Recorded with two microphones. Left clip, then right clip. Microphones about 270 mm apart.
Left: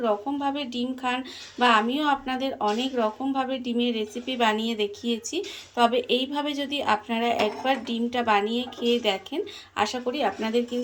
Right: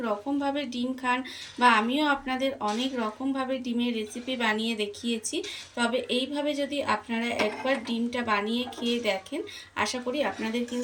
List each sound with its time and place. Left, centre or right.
0.0 s a woman's voice: centre